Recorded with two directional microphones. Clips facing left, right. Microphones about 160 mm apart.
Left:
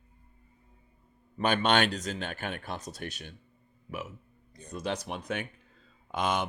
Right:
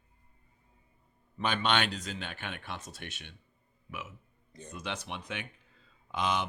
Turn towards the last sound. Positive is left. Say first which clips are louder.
# left 2 dB
turn(degrees=50)  # may be behind; listen again after turning